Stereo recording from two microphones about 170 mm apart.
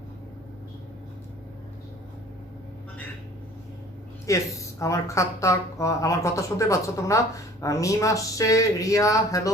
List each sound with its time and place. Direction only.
4.3 s speech: 20° left (ahead or behind)